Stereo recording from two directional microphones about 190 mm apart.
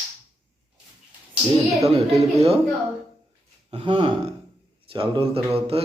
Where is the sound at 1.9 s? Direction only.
30° right (ahead or behind).